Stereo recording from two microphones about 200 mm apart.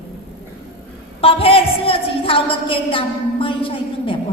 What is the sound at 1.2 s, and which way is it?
A woman's voice, 30° left (ahead or behind).